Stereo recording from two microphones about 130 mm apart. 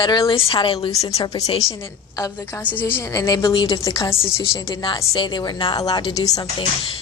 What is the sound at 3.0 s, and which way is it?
A woman's voice, 25° left (ahead or behind).